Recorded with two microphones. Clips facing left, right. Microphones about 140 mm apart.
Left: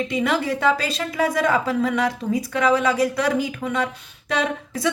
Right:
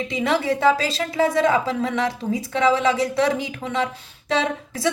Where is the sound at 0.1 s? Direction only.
25° right (ahead or behind).